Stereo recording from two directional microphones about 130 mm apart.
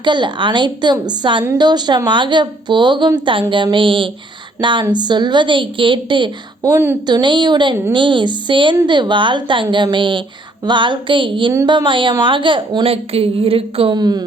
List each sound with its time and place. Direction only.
0.0 s a woman's voice: 35° right (ahead or behind)
7.1 s a woman's voice: 35° right (ahead or behind)
13.9 s a woman's voice: 30° right (ahead or behind)